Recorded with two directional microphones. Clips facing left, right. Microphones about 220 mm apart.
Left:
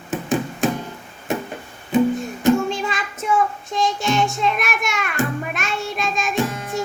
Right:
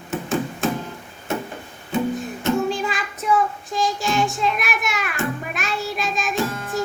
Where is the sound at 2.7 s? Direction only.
Centre (ahead or behind).